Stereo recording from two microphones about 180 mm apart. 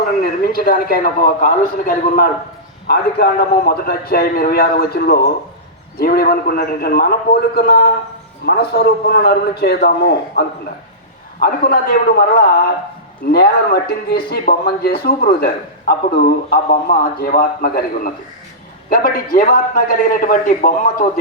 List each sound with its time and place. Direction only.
0.2 s a man's voice: 55° left (ahead or behind)